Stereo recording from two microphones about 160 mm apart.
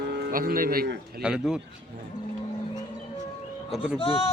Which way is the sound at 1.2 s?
5° right (ahead or behind).